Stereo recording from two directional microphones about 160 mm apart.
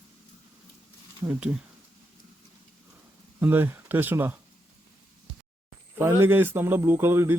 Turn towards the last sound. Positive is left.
turn(degrees=-15)  # may be behind; listen again after turning